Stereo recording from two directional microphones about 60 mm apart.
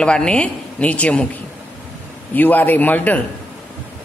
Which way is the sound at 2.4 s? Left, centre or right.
Left.